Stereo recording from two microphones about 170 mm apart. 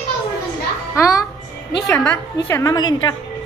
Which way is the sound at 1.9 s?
10° left (ahead or behind).